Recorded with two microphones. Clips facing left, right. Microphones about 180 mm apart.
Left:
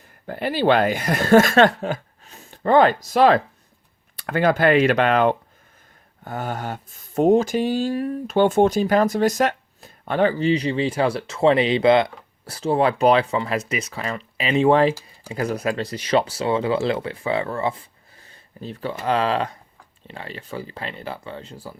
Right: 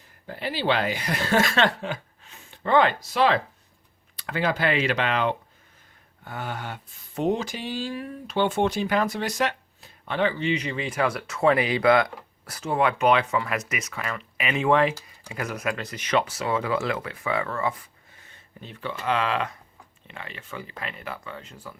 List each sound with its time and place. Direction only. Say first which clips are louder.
0.3 s speech: left 7 dB; 50° left (ahead or behind); by 21.8 s 35° left (ahead or behind)